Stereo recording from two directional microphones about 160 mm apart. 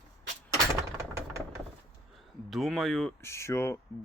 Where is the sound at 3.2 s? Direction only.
15° left (ahead or behind).